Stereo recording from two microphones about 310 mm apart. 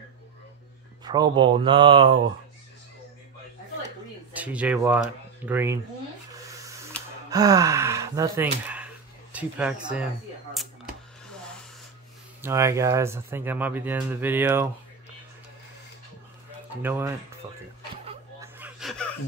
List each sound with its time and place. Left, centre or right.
1.0 s speech: centre
4.3 s speech: centre
6.4 s a sound: centre
7.2 s speech: centre
10.5 s typewriter: centre
12.4 s speech: centre
16.8 s speech: centre
18.0 s a sound: centre